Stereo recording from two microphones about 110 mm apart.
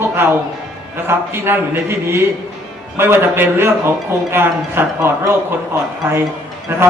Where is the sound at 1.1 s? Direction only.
20° right (ahead or behind).